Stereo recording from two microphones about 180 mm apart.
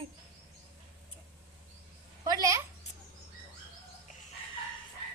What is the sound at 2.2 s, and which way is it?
Speech, 20° right (ahead or behind).